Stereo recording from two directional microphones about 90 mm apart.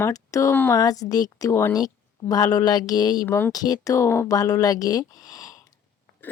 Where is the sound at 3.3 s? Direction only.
25° left (ahead or behind).